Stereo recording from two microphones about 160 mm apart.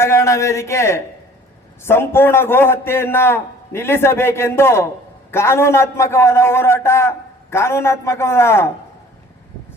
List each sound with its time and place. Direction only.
0.0 s a man's voice: 15° left (ahead or behind)